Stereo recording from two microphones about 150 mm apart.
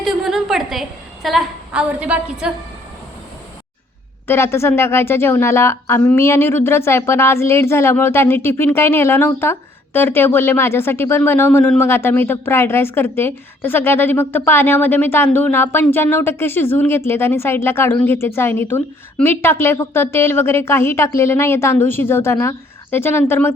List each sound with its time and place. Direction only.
0.0 s a woman's voice: centre (ahead or behind)
4.3 s a woman's voice: 15° left (ahead or behind)